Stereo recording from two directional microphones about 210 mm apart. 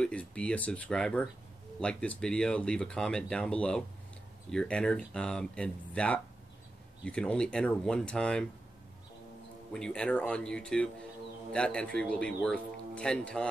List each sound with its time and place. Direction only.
0.0 s speech: 5° left (ahead or behind)
9.7 s speech: 5° left (ahead or behind)